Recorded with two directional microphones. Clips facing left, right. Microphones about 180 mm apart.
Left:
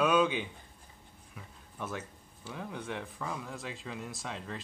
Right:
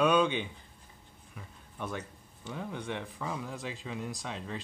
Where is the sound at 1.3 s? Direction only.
Centre (ahead or behind).